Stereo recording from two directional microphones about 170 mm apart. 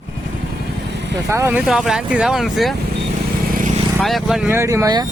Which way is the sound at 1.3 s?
15° right (ahead or behind).